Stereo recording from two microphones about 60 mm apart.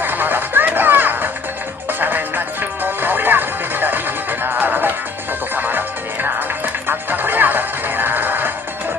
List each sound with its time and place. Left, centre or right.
0.0 s music: right